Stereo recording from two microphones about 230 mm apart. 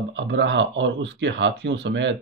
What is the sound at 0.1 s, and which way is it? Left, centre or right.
Speech, right.